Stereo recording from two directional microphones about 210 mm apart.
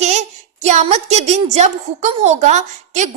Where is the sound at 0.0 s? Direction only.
30° right (ahead or behind).